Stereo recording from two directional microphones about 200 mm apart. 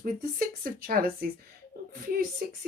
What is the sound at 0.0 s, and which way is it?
A woman's voice, 45° right (ahead or behind).